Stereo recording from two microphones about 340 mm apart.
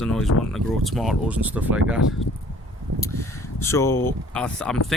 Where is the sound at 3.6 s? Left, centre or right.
Centre.